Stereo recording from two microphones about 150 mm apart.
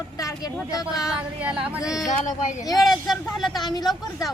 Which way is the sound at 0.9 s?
5° right (ahead or behind).